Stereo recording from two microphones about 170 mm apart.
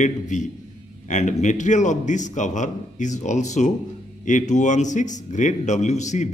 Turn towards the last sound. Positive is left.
turn(degrees=45)  # may be behind; listen again after turning